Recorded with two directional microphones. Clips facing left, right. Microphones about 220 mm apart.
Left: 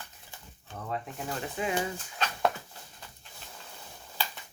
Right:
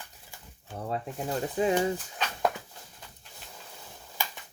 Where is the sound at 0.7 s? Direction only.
35° right (ahead or behind).